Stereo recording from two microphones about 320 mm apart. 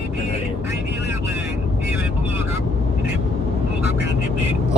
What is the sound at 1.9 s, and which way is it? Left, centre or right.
Vehicle, centre.